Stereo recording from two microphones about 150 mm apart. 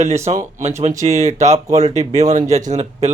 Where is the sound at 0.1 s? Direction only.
45° right (ahead or behind).